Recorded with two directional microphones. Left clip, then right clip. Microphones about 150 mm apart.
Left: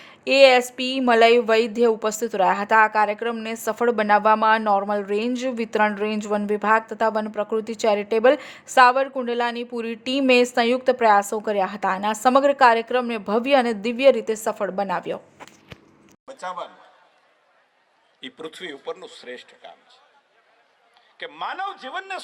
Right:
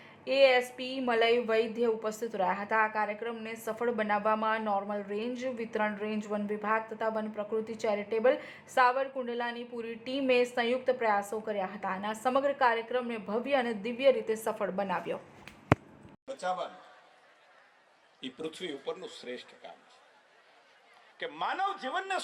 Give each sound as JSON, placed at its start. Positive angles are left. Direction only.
{"t": 0.0, "sound": "speech", "side_deg": 55}
{"t": 16.2, "sound": "a man's voice", "side_deg": 20}
{"t": 18.2, "sound": "a man's voice", "side_deg": 15}
{"t": 21.2, "sound": "a man's voice", "side_deg": 5}